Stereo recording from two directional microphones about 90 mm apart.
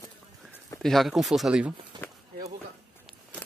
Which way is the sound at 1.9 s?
55° right (ahead or behind).